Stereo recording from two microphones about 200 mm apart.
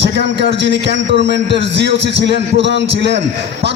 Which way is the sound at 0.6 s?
60° right (ahead or behind).